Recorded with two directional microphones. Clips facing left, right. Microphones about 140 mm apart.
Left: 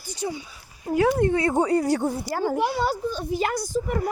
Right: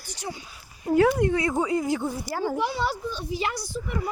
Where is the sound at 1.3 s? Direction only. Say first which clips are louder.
Left 3 dB; 30° left (ahead or behind).